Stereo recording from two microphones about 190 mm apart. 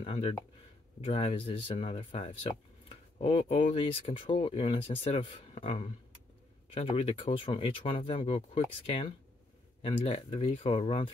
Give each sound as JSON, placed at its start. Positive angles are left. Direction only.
{"t": 0.0, "sound": "speech", "side_deg": 30}